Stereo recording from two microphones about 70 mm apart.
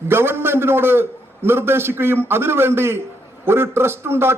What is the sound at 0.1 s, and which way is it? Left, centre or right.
A man's voice, right.